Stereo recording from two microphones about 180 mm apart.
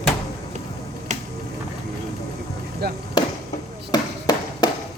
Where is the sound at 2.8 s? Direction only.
65° right (ahead or behind).